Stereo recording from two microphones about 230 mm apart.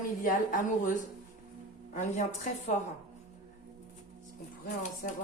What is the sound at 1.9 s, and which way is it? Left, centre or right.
Speech, left.